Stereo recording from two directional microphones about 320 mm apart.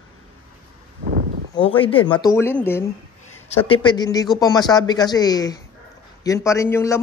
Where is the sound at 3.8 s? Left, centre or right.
Centre.